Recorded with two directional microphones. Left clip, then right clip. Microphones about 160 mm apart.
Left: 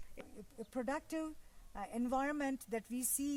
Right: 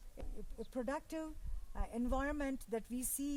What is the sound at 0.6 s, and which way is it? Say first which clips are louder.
Speech: left 1 dB; 20° right (ahead or behind).